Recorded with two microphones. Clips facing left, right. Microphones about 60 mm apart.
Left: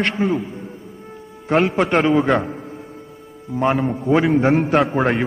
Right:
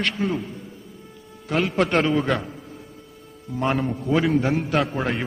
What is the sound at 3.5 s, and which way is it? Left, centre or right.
Speech, centre.